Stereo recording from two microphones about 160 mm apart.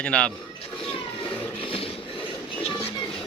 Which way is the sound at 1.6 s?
35° left (ahead or behind).